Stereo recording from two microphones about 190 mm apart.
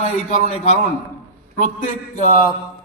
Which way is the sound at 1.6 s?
40° left (ahead or behind).